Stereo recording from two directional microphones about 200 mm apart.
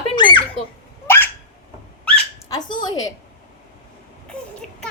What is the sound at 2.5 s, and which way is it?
Speech, 20° left (ahead or behind).